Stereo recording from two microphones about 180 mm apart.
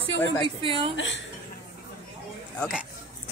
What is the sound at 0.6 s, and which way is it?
Speech, 30° right (ahead or behind).